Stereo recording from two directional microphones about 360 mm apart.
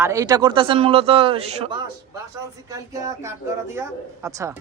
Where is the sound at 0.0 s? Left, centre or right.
Centre.